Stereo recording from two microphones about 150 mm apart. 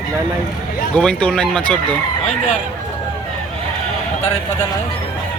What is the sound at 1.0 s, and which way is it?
Speech, 5° left (ahead or behind).